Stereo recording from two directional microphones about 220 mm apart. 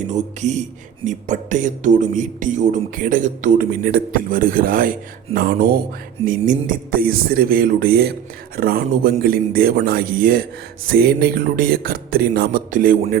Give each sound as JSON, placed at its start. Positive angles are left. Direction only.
{"t": 0.1, "sound": "a man's voice", "side_deg": -30}